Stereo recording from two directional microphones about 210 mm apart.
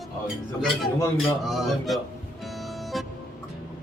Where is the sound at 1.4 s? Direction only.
Centre (ahead or behind).